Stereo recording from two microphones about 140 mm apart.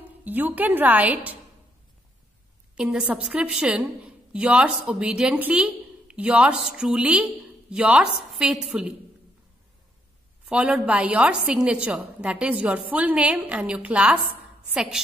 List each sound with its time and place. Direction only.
0.2 s a woman's voice: 10° right (ahead or behind)
2.7 s a woman's voice: 5° right (ahead or behind)
10.4 s a woman's voice: 10° right (ahead or behind)